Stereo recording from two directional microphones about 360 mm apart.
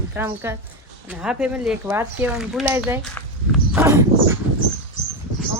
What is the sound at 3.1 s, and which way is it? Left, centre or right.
Walk, centre.